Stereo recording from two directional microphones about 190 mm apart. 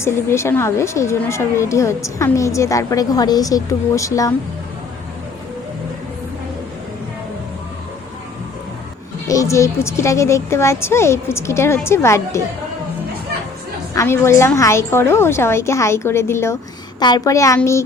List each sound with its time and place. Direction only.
0.0 s speech: 15° left (ahead or behind)
9.2 s speech: 15° left (ahead or behind)
13.9 s speech: 15° left (ahead or behind)